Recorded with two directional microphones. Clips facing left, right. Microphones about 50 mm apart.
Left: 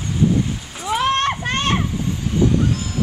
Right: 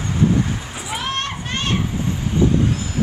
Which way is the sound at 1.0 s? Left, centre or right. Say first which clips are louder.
Left 8 dB; left.